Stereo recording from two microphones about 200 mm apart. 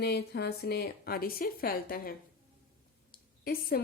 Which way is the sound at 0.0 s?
55° left (ahead or behind).